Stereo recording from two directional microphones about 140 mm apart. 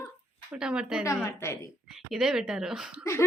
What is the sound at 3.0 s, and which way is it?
Speech, 20° left (ahead or behind).